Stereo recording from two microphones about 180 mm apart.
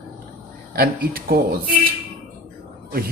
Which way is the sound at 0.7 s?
55° right (ahead or behind).